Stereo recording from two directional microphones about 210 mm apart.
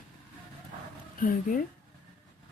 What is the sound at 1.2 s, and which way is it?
Speech, 40° left (ahead or behind).